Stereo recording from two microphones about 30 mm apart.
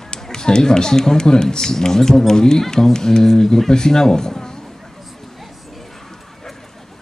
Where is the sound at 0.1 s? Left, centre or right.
Left.